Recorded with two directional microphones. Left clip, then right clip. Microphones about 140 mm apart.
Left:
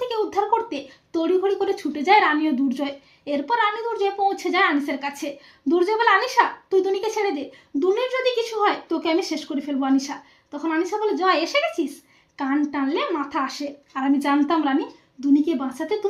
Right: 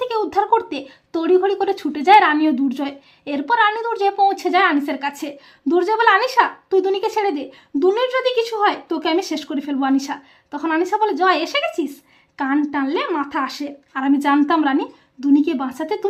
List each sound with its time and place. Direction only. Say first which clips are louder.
0.3 s speech: right 6 dB; 35° right (ahead or behind)
2.1 s speech: right 5 dB; 25° right (ahead or behind)
4.4 s a woman's voice: right 4 dB; 25° right (ahead or behind)
7.8 s a woman's voice: right 4 dB; 40° right (ahead or behind)